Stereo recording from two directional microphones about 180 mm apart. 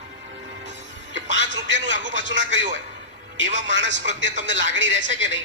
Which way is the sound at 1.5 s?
90° right.